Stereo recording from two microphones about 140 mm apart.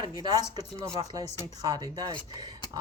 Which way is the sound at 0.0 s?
30° right (ahead or behind).